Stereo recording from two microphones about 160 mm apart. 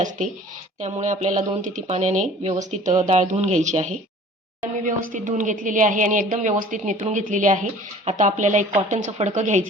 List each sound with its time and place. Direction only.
0.8 s a woman's voice: 50° right (ahead or behind)